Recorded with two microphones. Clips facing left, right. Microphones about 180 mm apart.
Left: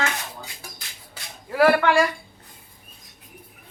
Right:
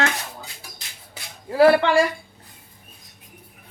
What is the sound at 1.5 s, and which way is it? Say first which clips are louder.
Speech: right 3 dB; 30° right (ahead or behind).